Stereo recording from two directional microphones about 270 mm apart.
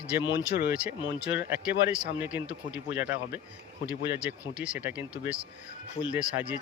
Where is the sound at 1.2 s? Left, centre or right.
Centre.